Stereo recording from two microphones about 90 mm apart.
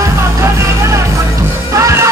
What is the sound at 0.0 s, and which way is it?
Music, 35° right (ahead or behind).